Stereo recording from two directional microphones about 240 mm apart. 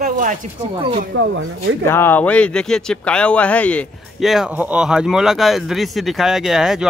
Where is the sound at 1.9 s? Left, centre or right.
Centre.